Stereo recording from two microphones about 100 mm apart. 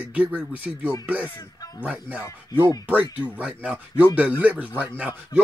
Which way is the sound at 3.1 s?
15° right (ahead or behind).